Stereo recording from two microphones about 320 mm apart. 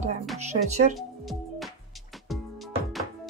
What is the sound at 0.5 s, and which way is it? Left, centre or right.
Speech, right.